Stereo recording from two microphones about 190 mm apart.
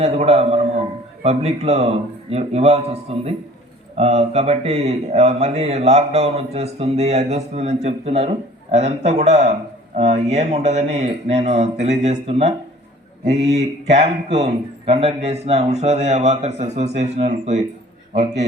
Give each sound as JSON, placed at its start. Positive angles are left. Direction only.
{"t": 0.0, "sound": "a man's voice", "side_deg": -35}
{"t": 13.4, "sound": "mantra", "side_deg": -65}
{"t": 13.9, "sound": "speech", "side_deg": -35}